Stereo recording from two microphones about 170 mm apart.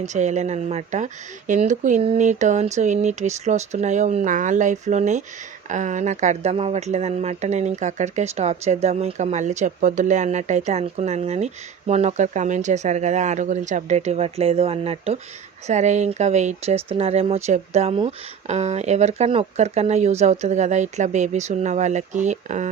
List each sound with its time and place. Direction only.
0.0 s speech: 45° right (ahead or behind)